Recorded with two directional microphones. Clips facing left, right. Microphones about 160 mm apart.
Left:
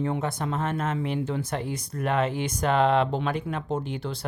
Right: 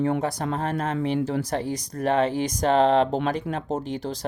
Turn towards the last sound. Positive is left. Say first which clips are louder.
# right 2 dB
turn(degrees=-40)  # may be behind; listen again after turning